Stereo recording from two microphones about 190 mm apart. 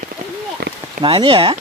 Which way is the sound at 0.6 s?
60° right (ahead or behind).